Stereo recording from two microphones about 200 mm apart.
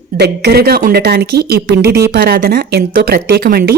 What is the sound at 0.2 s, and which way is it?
Speech, 55° right (ahead or behind).